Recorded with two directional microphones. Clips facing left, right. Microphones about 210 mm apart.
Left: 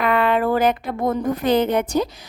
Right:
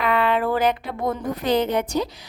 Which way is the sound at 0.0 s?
50° left (ahead or behind).